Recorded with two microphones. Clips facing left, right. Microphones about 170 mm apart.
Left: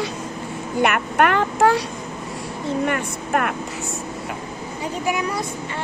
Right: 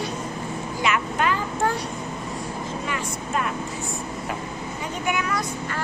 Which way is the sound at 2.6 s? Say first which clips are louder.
Left 12 dB; 60° left (ahead or behind).